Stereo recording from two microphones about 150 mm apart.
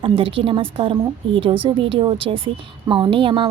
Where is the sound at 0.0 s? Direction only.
35° right (ahead or behind).